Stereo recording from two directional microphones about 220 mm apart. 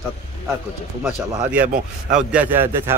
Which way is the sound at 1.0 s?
5° right (ahead or behind).